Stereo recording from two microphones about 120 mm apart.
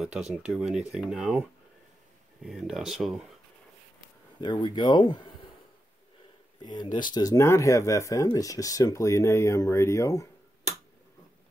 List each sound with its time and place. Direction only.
0.5 s speech: 5° right (ahead or behind)
2.4 s speech: 5° right (ahead or behind)
4.4 s speech: 40° left (ahead or behind)
6.6 s speech: 35° left (ahead or behind)